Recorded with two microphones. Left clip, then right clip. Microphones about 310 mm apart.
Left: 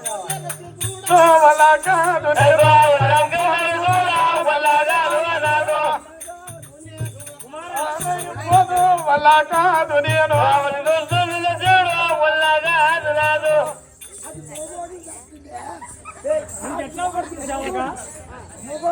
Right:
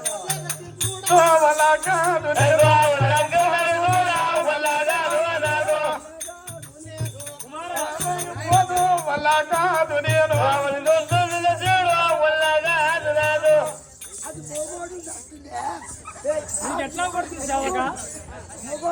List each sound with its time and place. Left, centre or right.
1.0 s music: centre
7.9 s music: centre
15.5 s dog: centre
16.6 s speech: centre